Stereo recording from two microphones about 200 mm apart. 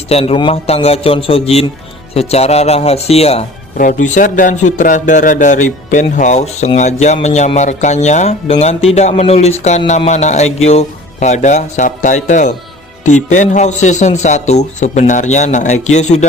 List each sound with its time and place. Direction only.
0.1 s a man's voice: 30° left (ahead or behind)